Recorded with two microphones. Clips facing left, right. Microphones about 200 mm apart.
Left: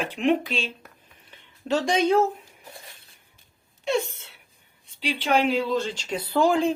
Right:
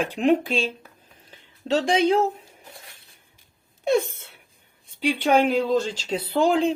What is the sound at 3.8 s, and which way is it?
Speech, 50° right (ahead or behind).